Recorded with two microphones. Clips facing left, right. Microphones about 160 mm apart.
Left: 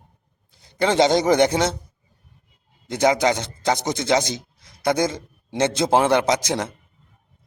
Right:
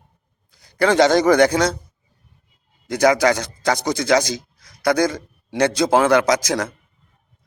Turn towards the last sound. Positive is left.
turn(degrees=25)  # may be behind; listen again after turning